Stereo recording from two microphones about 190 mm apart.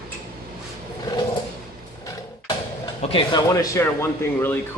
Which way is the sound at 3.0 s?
30° left (ahead or behind).